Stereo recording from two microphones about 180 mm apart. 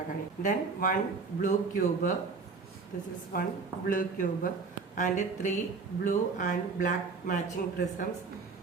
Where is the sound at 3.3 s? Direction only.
55° left (ahead or behind).